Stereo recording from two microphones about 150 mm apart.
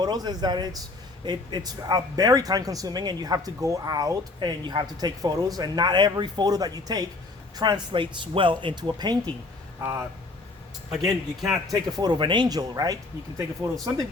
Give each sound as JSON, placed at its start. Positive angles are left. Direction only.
{"t": 0.0, "sound": "speech", "side_deg": -30}
{"t": 9.8, "sound": "speech", "side_deg": -15}
{"t": 10.9, "sound": "speech", "side_deg": 0}
{"t": 11.7, "sound": "speech", "side_deg": -25}